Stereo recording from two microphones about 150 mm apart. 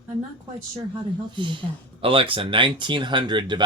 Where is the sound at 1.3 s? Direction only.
35° right (ahead or behind).